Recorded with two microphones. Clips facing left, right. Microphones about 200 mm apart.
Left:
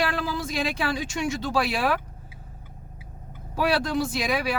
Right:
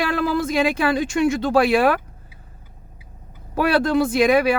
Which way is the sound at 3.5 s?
55° right (ahead or behind).